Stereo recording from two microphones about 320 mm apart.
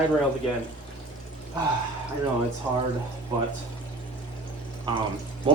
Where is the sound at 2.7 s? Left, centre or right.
Centre.